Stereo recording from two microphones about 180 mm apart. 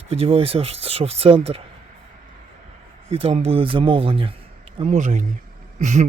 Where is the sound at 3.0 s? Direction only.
35° right (ahead or behind).